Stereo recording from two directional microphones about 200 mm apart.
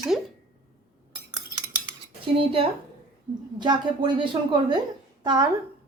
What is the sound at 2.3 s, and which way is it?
A woman's voice, 25° right (ahead or behind).